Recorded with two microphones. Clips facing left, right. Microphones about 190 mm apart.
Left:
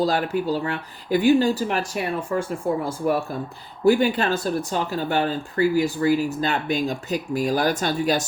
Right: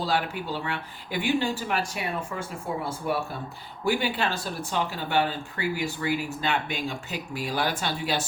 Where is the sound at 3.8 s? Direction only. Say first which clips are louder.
Left 8 dB; 45° left (ahead or behind).